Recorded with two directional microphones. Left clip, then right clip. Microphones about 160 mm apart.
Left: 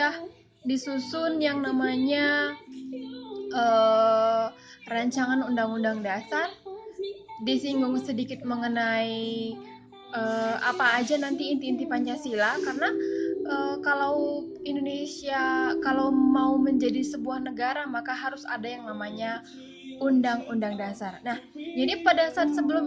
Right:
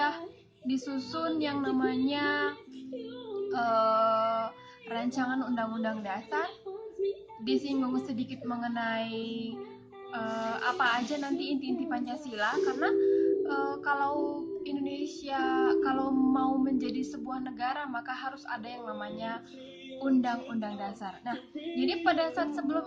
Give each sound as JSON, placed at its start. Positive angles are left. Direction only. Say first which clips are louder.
{"t": 0.9, "sound": "a child's voice", "louder": "left 6 dB", "side_deg": 30}
{"t": 3.5, "sound": "music", "louder": "left 6 dB", "side_deg": 30}
{"t": 7.4, "sound": "a child's voice", "louder": "left 4 dB", "side_deg": 30}
{"t": 13.5, "sound": "music", "louder": "left 4 dB", "side_deg": 30}
{"t": 20.0, "sound": "a child's voice", "louder": "left 5 dB", "side_deg": 30}
{"t": 22.5, "sound": "music", "louder": "left 6 dB", "side_deg": 30}